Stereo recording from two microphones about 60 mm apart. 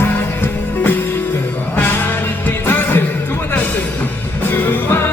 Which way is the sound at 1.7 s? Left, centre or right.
Left.